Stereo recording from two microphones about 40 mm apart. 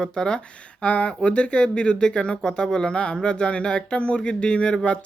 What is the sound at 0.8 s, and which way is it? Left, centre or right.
Speech, left.